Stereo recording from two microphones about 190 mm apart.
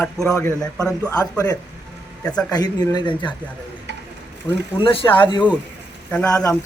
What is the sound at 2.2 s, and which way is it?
Speech, 5° left (ahead or behind).